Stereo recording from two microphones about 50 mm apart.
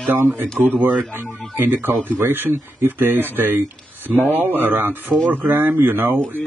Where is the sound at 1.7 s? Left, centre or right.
Right.